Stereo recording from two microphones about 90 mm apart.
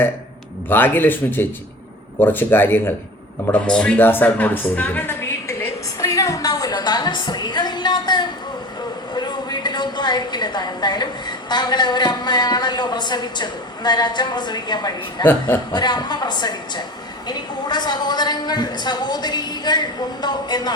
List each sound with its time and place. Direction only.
0.7 s speech: 20° left (ahead or behind)
3.7 s speech: 10° left (ahead or behind)
4.0 s a sound: 20° left (ahead or behind); by 14.9 s 50° left (ahead or behind)
15.2 s speech: 20° left (ahead or behind)
15.7 s a woman's voice: 55° left (ahead or behind)